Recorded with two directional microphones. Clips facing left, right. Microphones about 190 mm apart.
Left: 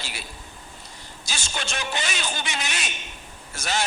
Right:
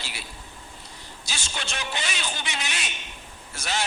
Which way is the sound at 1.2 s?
45° left (ahead or behind).